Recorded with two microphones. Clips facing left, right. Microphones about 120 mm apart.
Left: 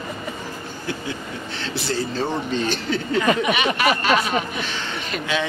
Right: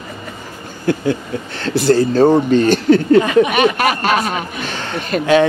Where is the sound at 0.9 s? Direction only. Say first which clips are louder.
Right 13 dB; 50° right (ahead or behind).